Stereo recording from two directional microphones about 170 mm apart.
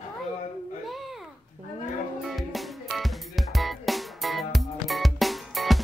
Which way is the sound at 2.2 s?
Centre (ahead or behind).